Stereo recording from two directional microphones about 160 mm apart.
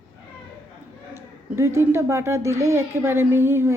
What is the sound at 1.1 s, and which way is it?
A child's voice, 15° right (ahead or behind).